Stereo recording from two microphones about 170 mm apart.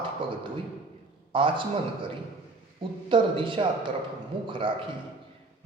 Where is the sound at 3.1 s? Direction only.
30° right (ahead or behind).